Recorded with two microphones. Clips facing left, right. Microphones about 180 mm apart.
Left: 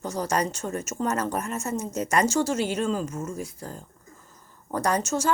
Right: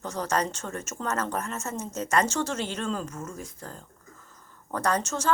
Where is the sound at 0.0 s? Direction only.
10° left (ahead or behind).